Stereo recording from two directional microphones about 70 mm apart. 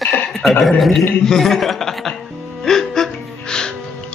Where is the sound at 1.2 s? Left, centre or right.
Centre.